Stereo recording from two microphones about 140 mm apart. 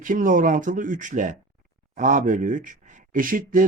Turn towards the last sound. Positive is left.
turn(degrees=-75)  # may be behind; listen again after turning